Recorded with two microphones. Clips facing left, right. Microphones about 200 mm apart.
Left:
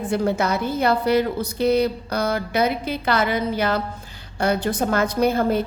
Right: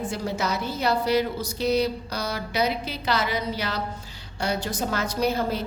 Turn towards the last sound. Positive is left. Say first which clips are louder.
# left 6 dB
turn(degrees=55)  # may be behind; listen again after turning